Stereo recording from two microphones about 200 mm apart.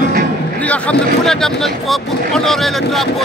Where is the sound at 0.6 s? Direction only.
5° left (ahead or behind).